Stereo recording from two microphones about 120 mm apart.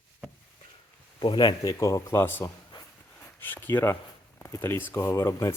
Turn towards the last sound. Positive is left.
turn(degrees=25)  # may be behind; listen again after turning